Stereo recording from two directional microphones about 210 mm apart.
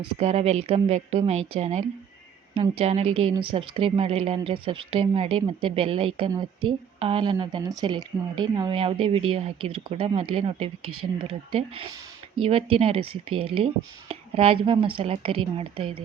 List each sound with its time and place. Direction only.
0.2 s a woman's voice: 30° right (ahead or behind)